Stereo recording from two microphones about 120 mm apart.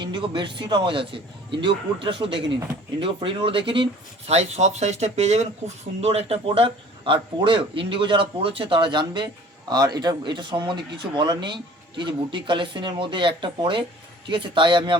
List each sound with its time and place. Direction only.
0.0 s speech: 40° right (ahead or behind)
4.3 s speech: 70° right (ahead or behind); by 14.9 s 45° right (ahead or behind)